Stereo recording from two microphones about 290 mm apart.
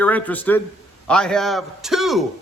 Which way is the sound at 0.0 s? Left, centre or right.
Centre.